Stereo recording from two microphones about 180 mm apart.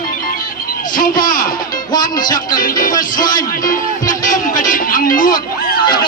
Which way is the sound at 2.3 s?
50° left (ahead or behind).